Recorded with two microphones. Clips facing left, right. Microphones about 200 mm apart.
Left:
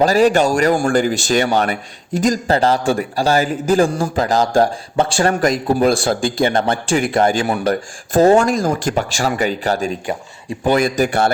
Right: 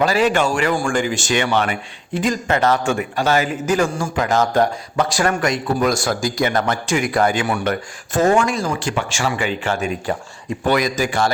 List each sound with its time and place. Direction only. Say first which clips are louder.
0.0 s speech: left 4 dB; 40° left (ahead or behind)
7.3 s speech: left 3 dB; 40° left (ahead or behind)
10.7 s speech: left 3 dB; 50° left (ahead or behind)